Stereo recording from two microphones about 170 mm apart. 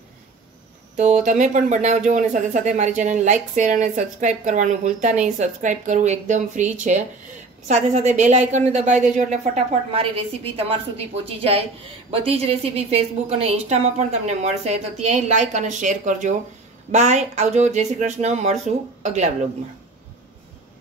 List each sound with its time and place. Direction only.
0.9 s speech: 45° right (ahead or behind)
9.9 s a woman's voice: 35° right (ahead or behind)